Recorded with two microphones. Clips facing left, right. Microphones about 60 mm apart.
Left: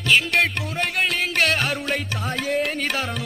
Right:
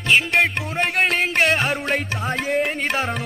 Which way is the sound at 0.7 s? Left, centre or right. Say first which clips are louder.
Right 5 dB; right.